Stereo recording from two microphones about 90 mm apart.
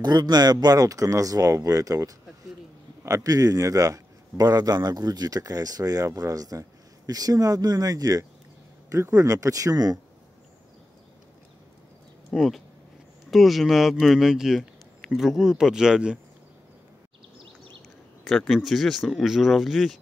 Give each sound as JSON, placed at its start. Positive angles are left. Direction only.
{"t": 0.0, "sound": "a man's voice", "side_deg": -50}
{"t": 12.4, "sound": "speech", "side_deg": 0}
{"t": 18.5, "sound": "speech", "side_deg": 0}